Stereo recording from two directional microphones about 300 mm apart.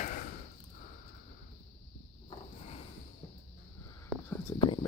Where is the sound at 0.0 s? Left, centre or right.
Left.